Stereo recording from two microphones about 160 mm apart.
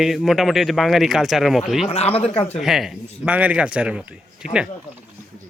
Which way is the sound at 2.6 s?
Centre (ahead or behind).